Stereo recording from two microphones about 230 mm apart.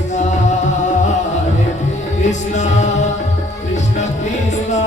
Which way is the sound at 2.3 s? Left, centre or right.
Left.